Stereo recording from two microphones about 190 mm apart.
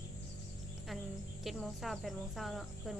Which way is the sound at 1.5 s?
Centre (ahead or behind).